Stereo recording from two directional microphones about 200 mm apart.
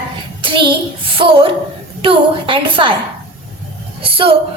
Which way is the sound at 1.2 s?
25° right (ahead or behind).